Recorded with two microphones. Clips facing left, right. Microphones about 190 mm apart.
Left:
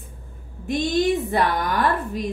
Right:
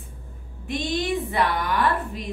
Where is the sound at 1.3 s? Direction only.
40° left (ahead or behind).